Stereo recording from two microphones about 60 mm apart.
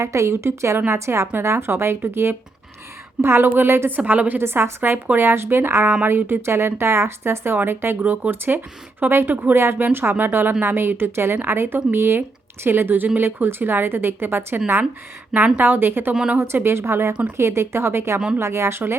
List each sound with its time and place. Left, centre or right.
0.0 s a woman's voice: right
3.9 s a woman's voice: right
4.4 s a woman's voice: right
9.3 s a woman's voice: right